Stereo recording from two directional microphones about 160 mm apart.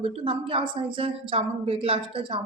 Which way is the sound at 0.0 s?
35° right (ahead or behind).